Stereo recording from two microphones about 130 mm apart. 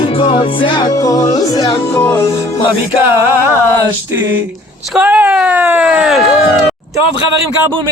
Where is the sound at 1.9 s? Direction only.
15° left (ahead or behind).